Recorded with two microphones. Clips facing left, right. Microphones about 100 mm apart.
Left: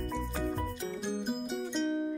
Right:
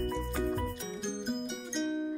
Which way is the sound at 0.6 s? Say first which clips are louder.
Left 1 dB; 5° left (ahead or behind).